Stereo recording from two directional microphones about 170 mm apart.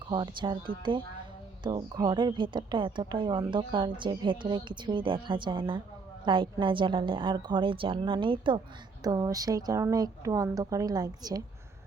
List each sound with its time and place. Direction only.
0.1 s a woman's voice: 25° right (ahead or behind)